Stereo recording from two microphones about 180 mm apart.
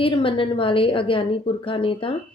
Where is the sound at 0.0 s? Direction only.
30° left (ahead or behind).